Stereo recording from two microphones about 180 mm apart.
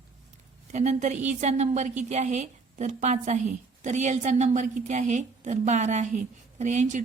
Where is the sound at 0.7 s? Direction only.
40° right (ahead or behind).